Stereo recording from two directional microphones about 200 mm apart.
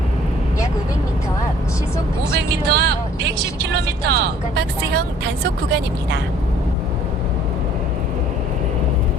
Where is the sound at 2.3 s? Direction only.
55° right (ahead or behind).